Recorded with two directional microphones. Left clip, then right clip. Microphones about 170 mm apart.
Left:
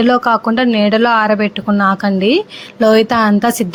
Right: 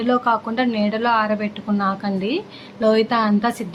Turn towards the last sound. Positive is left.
turn(degrees=45)  # may be behind; listen again after turning